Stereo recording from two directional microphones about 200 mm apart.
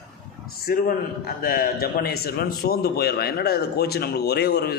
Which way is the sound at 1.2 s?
45° left (ahead or behind).